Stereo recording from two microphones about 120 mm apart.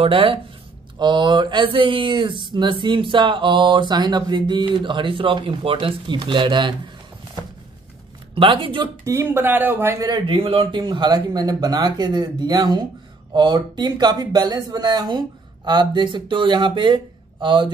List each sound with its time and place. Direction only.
0.0 s speech: 50° right (ahead or behind)
8.4 s speech: 45° right (ahead or behind)
9.0 s speech: 20° right (ahead or behind)
10.0 s speech: 35° right (ahead or behind)
10.3 s speech: 50° right (ahead or behind)
10.8 s speech: 35° right (ahead or behind)